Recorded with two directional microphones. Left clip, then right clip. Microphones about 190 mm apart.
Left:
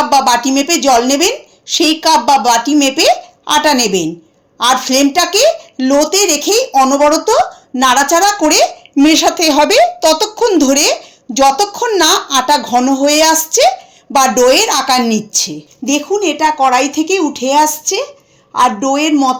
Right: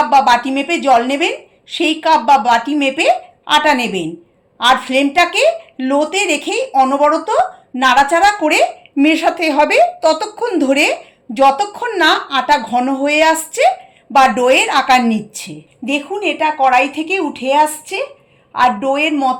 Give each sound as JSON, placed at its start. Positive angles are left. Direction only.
{"t": 0.0, "sound": "a woman's voice", "side_deg": 45}